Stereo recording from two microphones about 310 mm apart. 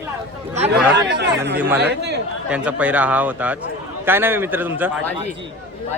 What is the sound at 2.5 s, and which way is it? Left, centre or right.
Speech, centre.